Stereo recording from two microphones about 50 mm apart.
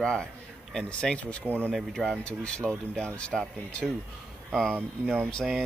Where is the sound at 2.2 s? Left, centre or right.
Centre.